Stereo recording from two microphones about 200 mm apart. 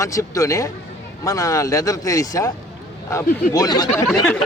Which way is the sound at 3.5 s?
20° left (ahead or behind).